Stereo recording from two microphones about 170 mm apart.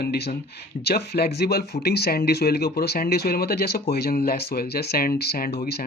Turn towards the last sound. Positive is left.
turn(degrees=70)  # may be behind; listen again after turning